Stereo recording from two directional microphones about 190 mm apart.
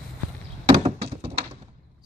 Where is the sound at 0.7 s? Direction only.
20° right (ahead or behind).